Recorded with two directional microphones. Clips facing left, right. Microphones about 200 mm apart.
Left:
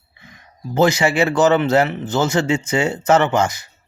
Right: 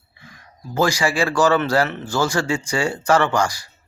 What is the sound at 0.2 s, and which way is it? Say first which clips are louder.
A man's voice: left 5 dB; 20° left (ahead or behind).